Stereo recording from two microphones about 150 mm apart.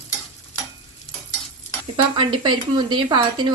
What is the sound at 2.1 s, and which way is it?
Speech, 30° right (ahead or behind).